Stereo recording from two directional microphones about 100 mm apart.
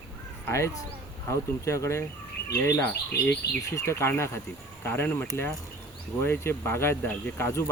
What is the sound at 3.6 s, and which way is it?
Speech, 30° left (ahead or behind).